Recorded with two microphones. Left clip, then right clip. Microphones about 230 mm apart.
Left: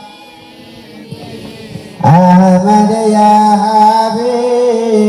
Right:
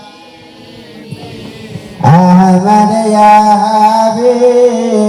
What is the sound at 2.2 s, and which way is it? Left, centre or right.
Music, centre.